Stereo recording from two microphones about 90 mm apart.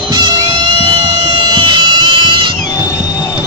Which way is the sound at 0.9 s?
50° right (ahead or behind).